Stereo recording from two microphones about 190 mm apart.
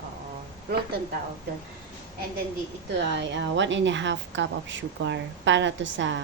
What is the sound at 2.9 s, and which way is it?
A woman's voice, 70° right (ahead or behind).